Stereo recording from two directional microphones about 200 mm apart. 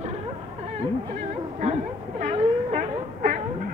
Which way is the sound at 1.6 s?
35° right (ahead or behind).